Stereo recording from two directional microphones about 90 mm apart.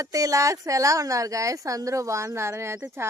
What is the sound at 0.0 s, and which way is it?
Speech, 40° right (ahead or behind).